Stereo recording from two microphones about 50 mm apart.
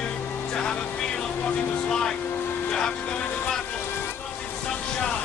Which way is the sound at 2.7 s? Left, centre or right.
Centre.